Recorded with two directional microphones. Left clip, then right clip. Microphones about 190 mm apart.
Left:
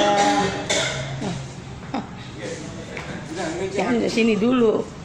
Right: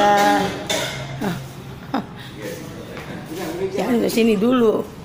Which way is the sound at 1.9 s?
20° right (ahead or behind).